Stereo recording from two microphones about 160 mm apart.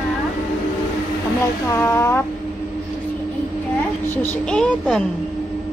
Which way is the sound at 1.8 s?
15° left (ahead or behind).